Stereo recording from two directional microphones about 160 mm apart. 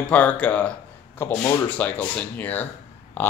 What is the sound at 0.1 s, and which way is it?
Speech, 10° left (ahead or behind).